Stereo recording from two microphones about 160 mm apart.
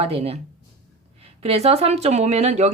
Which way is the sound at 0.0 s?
40° right (ahead or behind).